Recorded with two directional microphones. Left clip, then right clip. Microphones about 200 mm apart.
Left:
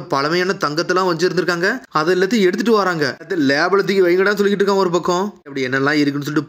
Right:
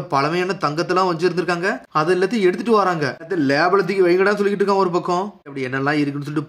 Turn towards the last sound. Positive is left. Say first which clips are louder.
# left 4 dB
turn(degrees=20)  # may be behind; listen again after turning